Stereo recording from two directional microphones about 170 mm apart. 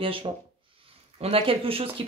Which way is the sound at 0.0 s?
30° right (ahead or behind).